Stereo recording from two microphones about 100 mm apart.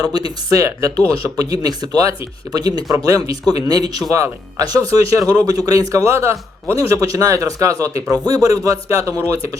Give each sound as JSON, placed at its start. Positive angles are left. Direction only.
{"t": 0.0, "sound": "speech", "side_deg": -40}